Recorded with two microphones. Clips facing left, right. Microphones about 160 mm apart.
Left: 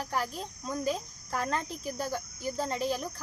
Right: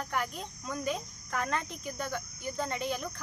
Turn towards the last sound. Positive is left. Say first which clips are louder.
# left 2 dB
turn(degrees=35)  # may be behind; listen again after turning